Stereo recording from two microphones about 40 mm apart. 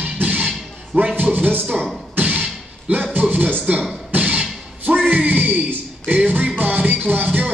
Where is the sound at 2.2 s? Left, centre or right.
Right.